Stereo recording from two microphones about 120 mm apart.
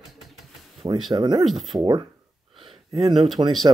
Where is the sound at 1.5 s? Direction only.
Centre (ahead or behind).